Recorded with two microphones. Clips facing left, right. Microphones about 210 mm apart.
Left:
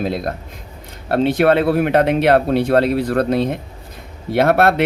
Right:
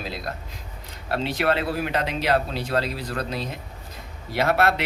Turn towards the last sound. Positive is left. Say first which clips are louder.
# left 8 dB
turn(degrees=55)  # may be behind; listen again after turning